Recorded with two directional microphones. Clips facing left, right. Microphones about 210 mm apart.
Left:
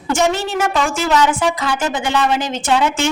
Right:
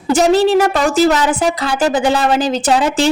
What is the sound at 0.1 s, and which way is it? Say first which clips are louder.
A woman's voice: right 7 dB; 35° right (ahead or behind).